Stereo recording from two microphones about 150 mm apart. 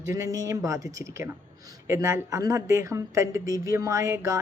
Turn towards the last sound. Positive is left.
turn(degrees=-20)  # may be behind; listen again after turning